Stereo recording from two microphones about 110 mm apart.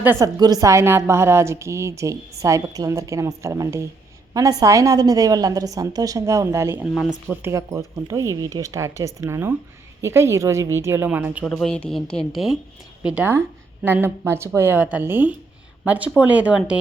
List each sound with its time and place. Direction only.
0.2 s a woman's voice: 35° right (ahead or behind)
6.8 s a woman's voice: centre (ahead or behind)
7.4 s a woman's voice: 25° right (ahead or behind)
11.4 s a woman's voice: 5° left (ahead or behind)
13.0 s a woman's voice: 15° right (ahead or behind)